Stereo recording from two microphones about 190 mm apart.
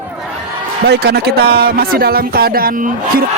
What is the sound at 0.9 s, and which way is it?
A man's voice, 55° right (ahead or behind).